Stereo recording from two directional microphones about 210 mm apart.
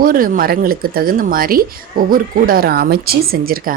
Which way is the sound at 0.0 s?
40° right (ahead or behind).